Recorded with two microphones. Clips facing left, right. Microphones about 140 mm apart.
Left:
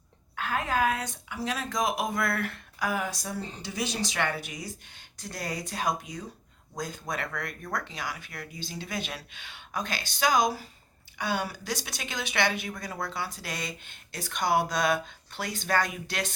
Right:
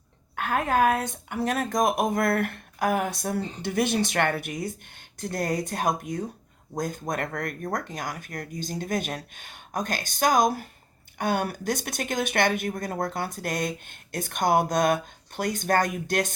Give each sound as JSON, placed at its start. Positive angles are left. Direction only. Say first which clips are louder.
{"t": 0.3, "sound": "speech", "louder": "right 5 dB", "side_deg": -55}